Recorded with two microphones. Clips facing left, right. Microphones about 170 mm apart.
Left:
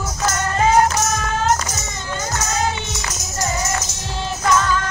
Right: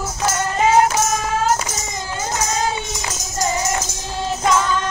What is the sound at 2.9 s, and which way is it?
Music, 10° right (ahead or behind).